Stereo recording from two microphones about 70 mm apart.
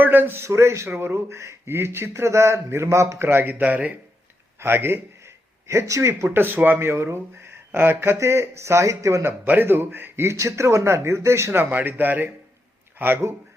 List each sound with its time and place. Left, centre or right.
0.0 s speech: right
4.6 s speech: right
5.6 s speech: right
6.2 s speech: right
9.5 s speech: right
11.6 s speech: right